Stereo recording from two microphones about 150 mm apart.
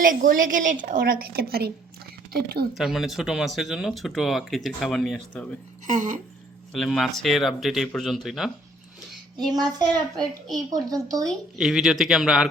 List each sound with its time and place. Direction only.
0.0 s a woman's voice: 65° right (ahead or behind); by 2.6 s 90° right
2.7 s speech: centre (ahead or behind)
5.8 s a woman's voice: 60° right (ahead or behind)
6.7 s speech: centre (ahead or behind)
9.4 s child singing: 25° right (ahead or behind)
11.2 s speech: centre (ahead or behind)